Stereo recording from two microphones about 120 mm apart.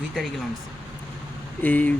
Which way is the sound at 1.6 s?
15° left (ahead or behind).